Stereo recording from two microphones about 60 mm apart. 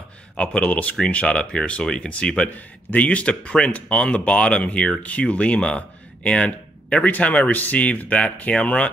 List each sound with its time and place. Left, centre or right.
0.4 s speech: centre